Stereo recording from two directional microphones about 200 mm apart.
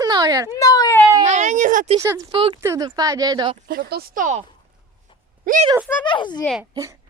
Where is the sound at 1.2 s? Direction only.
35° right (ahead or behind).